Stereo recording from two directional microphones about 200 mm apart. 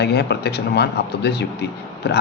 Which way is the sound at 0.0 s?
55° left (ahead or behind).